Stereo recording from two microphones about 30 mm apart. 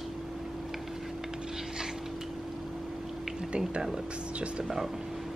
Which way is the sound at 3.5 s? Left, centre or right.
Right.